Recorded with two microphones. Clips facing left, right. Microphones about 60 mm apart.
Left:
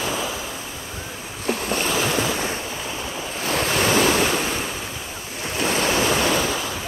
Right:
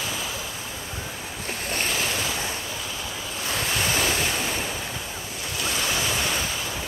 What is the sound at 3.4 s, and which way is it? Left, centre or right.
Waves, left.